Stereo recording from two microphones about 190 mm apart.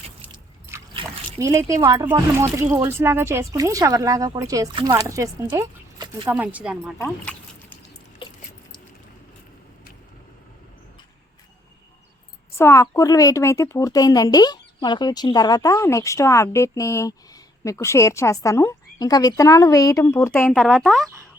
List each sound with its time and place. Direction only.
0.3 s speech: 20° right (ahead or behind)
7.0 s a sound: 10° left (ahead or behind)
12.5 s speech: 15° left (ahead or behind)